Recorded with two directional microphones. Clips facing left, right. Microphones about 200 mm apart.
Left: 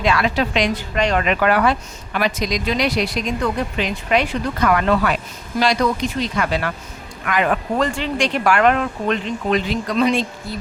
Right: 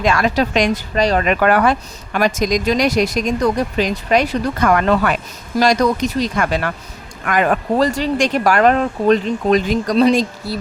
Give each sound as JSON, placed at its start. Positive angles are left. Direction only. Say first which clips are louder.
{"t": 0.0, "sound": "speech", "louder": "right 3 dB", "side_deg": -45}